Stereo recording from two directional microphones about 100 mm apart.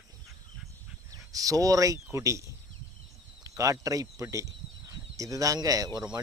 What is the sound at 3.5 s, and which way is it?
Speech, 30° right (ahead or behind).